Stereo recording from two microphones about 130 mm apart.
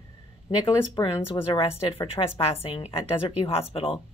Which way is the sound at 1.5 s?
45° left (ahead or behind).